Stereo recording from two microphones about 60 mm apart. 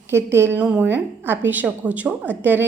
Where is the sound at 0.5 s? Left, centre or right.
Right.